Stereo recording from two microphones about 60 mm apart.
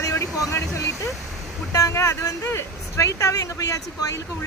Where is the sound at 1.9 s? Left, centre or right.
Left.